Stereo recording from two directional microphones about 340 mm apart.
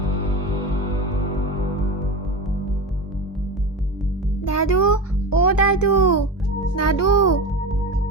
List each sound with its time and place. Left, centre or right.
4.4 s music: left
5.3 s a child's voice: left